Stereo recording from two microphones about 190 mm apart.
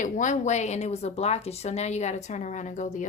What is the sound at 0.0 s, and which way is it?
A woman's voice, 40° left (ahead or behind).